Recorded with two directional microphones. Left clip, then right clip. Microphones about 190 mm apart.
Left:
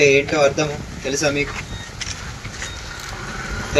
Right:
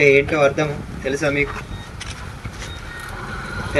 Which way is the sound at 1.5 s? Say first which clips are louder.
Left 3 dB; 65° right (ahead or behind).